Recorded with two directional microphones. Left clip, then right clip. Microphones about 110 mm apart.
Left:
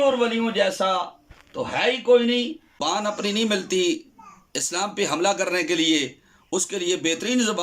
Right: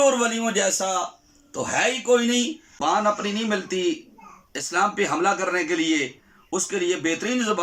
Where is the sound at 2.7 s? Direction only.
40° left (ahead or behind).